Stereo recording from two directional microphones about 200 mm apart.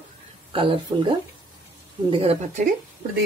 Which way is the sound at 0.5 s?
25° right (ahead or behind).